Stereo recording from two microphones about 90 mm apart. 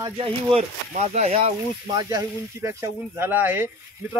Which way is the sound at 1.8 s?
45° right (ahead or behind).